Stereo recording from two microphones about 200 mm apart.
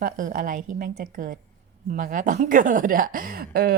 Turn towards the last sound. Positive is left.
turn(degrees=-50)  # may be behind; listen again after turning